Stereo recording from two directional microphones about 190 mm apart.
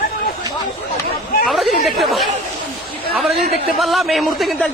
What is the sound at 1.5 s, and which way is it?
Chatter, centre (ahead or behind).